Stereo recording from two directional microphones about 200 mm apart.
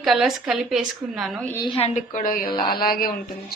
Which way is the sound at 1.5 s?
25° left (ahead or behind).